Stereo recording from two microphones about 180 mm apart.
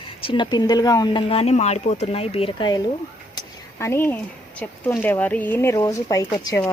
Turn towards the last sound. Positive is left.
turn(degrees=15)  # may be behind; listen again after turning